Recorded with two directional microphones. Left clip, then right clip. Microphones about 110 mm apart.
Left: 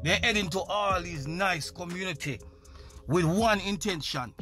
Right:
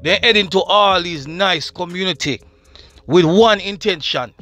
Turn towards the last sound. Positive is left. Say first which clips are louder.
# right 14 dB
turn(degrees=-20)  # may be behind; listen again after turning